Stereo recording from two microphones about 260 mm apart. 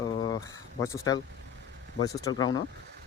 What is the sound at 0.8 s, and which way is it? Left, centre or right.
Speech, centre.